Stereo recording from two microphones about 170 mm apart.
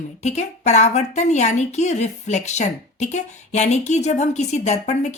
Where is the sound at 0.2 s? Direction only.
40° left (ahead or behind).